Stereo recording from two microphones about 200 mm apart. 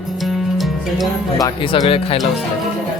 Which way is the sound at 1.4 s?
25° left (ahead or behind).